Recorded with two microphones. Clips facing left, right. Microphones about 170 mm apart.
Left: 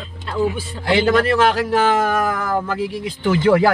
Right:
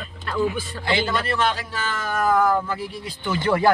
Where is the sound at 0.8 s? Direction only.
90° left.